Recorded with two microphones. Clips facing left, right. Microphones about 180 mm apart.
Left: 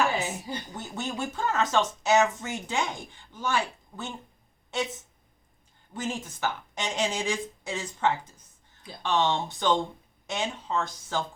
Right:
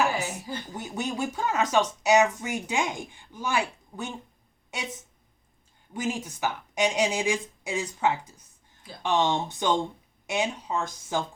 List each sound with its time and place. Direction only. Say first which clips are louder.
0.2 s a sound: even; 25° left (ahead or behind)
0.7 s speech: right 6 dB; 10° right (ahead or behind)
5.9 s speech: right 3 dB; 10° right (ahead or behind)